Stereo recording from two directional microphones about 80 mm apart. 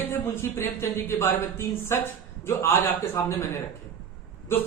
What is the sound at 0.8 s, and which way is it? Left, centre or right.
Speech, left.